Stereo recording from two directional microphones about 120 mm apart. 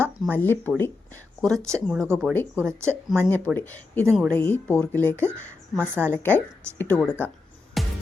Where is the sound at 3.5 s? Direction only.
15° left (ahead or behind).